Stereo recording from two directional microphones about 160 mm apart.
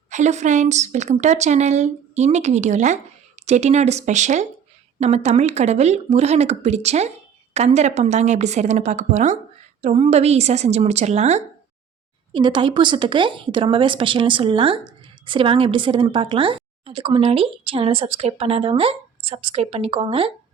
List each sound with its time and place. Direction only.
0.1 s a woman's voice: 45° right (ahead or behind)
12.3 s speech: 30° right (ahead or behind)